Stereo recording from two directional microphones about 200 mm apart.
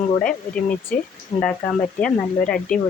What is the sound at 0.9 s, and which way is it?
Speech, 45° left (ahead or behind).